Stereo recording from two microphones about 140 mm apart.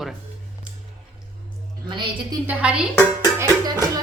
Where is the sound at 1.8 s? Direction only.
35° right (ahead or behind).